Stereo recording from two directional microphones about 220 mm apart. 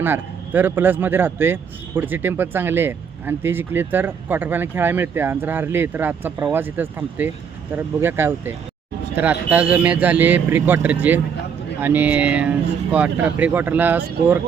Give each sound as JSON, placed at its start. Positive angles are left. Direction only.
{"t": 0.0, "sound": "speech", "side_deg": -10}